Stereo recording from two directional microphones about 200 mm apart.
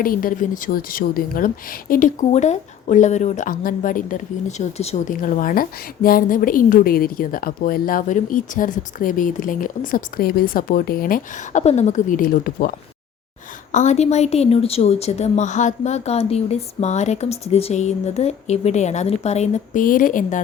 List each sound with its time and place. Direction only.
0.0 s speech: 45° left (ahead or behind)
11.6 s a woman's voice: 35° left (ahead or behind)
13.7 s a woman's voice: 35° left (ahead or behind)